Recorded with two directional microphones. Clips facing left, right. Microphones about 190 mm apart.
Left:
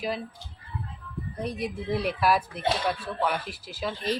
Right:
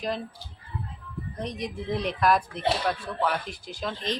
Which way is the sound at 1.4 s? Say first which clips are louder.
Left 2 dB; 5° left (ahead or behind).